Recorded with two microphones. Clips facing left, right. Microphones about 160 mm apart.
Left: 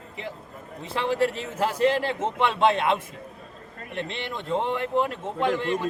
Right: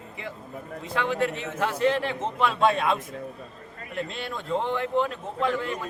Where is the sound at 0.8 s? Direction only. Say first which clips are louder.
Left 2 dB; 30° left (ahead or behind).